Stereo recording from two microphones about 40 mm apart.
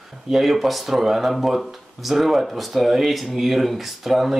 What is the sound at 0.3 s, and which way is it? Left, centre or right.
Speech, centre.